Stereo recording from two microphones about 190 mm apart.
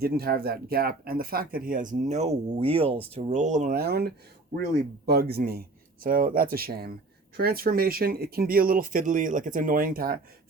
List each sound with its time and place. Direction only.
0.0 s speech: 50° right (ahead or behind)